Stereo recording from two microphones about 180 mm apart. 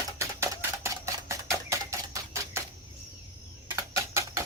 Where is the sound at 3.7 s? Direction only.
15° right (ahead or behind).